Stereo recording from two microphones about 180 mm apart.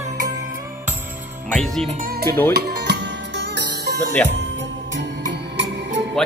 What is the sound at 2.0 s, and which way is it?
Music, 55° right (ahead or behind).